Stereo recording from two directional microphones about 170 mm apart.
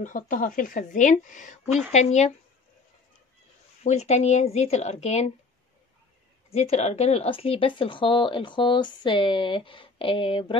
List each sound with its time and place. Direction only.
0.0 s a woman's voice: 50° left (ahead or behind)
3.8 s speech: 40° left (ahead or behind)
6.5 s speech: 40° left (ahead or behind)